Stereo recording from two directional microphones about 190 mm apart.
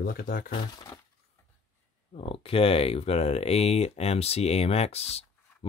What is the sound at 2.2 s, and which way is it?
Speech, 30° left (ahead or behind).